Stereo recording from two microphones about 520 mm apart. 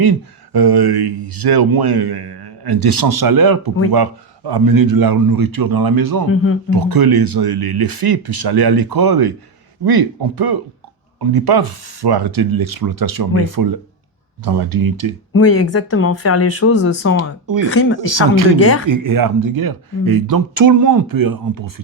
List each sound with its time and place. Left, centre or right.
0.5 s speech: right
6.3 s speech: left
6.7 s speech: right
15.3 s speech: left
18.1 s speech: right
18.6 s speech: left
18.9 s speech: right